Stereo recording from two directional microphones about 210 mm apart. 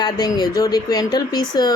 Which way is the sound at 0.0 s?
20° left (ahead or behind).